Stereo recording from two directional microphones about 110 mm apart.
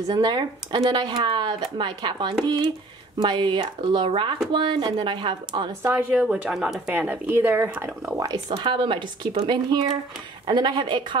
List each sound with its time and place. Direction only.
0.1 s speech: 40° right (ahead or behind)
5.8 s speech: 15° right (ahead or behind)
8.2 s speech: 40° right (ahead or behind)